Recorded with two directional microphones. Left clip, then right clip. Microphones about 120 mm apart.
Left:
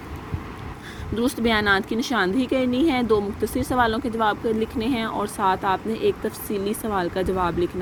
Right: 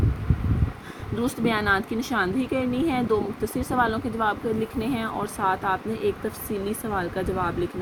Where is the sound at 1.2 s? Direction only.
30° left (ahead or behind).